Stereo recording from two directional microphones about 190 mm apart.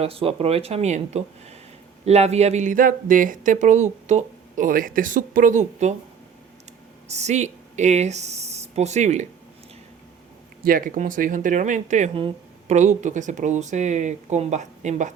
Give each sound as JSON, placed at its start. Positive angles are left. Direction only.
{"t": 0.0, "sound": "speech", "side_deg": -30}
{"t": 7.1, "sound": "speech", "side_deg": -35}
{"t": 10.6, "sound": "speech", "side_deg": -50}